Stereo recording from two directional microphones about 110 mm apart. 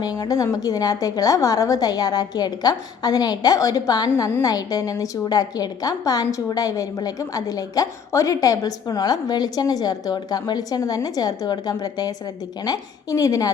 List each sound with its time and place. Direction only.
0.3 s a woman's voice: 30° left (ahead or behind)